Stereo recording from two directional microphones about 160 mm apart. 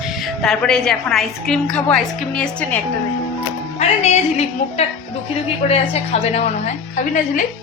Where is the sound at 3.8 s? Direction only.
40° left (ahead or behind).